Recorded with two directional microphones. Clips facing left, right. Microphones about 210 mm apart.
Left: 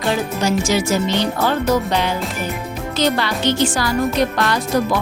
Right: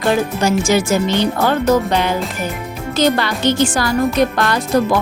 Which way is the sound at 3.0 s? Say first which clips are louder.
Right 3 dB; 50° right (ahead or behind).